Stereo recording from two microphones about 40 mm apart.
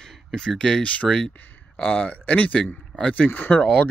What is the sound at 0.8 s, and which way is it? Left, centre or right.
Speech, left.